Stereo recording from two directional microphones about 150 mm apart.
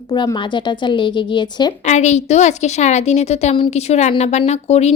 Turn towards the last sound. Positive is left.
turn(degrees=45)  # may be behind; listen again after turning